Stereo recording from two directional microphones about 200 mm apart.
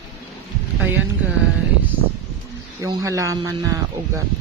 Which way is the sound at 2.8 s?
15° right (ahead or behind).